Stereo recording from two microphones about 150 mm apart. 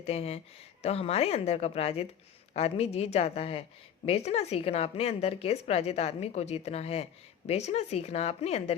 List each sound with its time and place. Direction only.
0.0 s a woman's voice: 45° left (ahead or behind)